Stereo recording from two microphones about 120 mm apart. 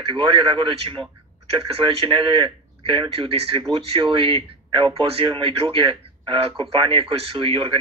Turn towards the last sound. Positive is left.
turn(degrees=-50)  # may be behind; listen again after turning